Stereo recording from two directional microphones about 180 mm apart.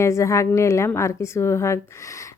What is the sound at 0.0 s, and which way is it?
Speech, 15° left (ahead or behind).